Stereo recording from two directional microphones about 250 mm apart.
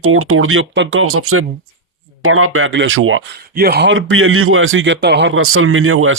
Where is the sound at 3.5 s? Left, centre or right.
Right.